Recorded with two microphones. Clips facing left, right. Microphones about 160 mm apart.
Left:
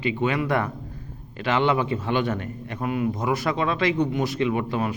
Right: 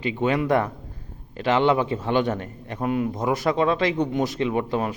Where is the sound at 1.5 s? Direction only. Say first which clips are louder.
Right 2 dB; 35° right (ahead or behind).